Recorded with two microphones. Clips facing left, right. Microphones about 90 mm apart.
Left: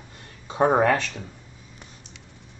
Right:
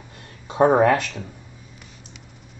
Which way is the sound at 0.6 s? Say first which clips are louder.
Right 3 dB; 45° right (ahead or behind).